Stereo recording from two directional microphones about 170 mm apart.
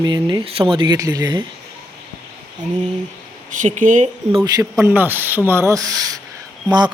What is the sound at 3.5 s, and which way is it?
Speech, 50° right (ahead or behind).